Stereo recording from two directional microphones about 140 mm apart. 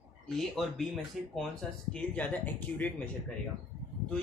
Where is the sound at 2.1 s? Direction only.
10° left (ahead or behind).